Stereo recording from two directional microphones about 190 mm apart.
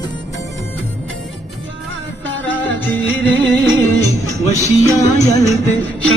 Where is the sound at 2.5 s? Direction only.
10° left (ahead or behind).